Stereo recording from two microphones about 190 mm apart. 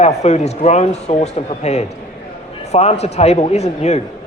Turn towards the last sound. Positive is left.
turn(degrees=35)  # may be behind; listen again after turning